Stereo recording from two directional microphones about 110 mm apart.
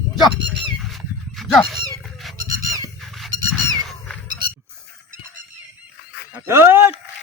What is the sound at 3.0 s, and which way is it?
Squeak, centre (ahead or behind).